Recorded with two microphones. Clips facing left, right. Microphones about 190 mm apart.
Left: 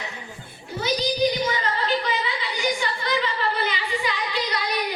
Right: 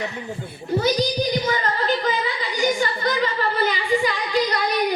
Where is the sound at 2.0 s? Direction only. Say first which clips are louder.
Right 3 dB; 45° right (ahead or behind).